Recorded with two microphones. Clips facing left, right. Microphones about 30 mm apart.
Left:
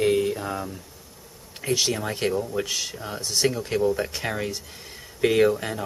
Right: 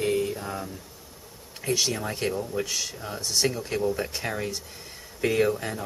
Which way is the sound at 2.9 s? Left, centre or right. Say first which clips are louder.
Left 1 dB; centre.